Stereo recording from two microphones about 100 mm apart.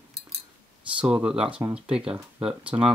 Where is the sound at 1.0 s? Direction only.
10° right (ahead or behind).